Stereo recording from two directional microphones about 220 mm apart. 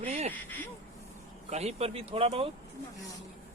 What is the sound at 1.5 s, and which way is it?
Speech, 30° right (ahead or behind).